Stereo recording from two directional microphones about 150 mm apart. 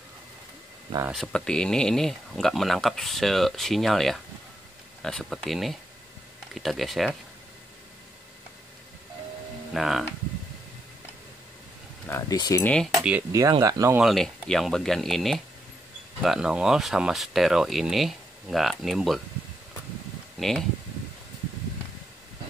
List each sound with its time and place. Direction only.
1.1 s speech: 5° left (ahead or behind)
9.8 s speech: centre (ahead or behind)
12.1 s speech: 20° left (ahead or behind)
12.6 s speech: 5° left (ahead or behind)
13.3 s speech: 25° right (ahead or behind)
13.9 s speech: centre (ahead or behind)
20.3 s speech: centre (ahead or behind)